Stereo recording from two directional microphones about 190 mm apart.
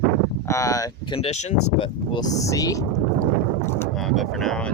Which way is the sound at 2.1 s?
20° left (ahead or behind).